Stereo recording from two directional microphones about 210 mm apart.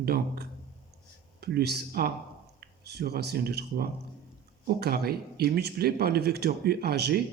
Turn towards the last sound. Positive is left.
turn(degrees=-50)  # may be behind; listen again after turning